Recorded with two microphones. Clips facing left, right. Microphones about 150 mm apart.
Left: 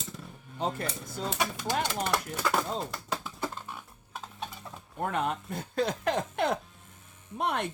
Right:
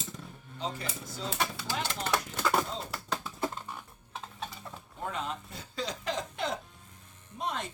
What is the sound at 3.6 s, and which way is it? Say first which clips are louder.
Pig: even; 5° left (ahead or behind).